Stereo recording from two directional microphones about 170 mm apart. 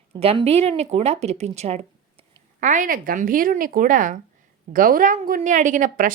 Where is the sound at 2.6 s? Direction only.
50° right (ahead or behind).